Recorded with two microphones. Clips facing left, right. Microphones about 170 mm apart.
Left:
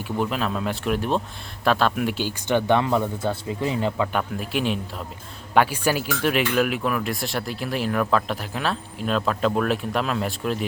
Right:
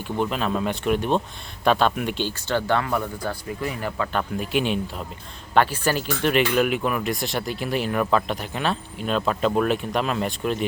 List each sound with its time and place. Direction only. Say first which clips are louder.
0.0 s speech: even; centre (ahead or behind)
2.5 s speech: left 4 dB; 20° left (ahead or behind)
4.2 s speech: right 1 dB; centre (ahead or behind)